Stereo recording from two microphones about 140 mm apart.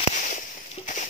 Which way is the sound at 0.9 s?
70° left (ahead or behind).